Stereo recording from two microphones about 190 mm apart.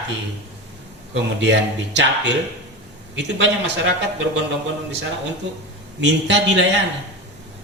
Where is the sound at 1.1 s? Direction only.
70° right (ahead or behind).